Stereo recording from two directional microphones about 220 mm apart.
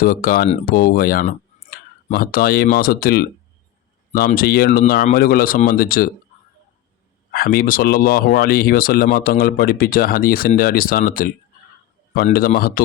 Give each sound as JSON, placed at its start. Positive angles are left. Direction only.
{"t": 0.0, "sound": "speech", "side_deg": 40}
{"t": 7.3, "sound": "speech", "side_deg": 40}